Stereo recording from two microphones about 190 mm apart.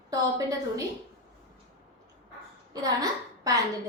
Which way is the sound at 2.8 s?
20° right (ahead or behind).